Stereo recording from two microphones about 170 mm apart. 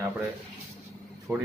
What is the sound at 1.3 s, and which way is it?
Speech, 10° right (ahead or behind).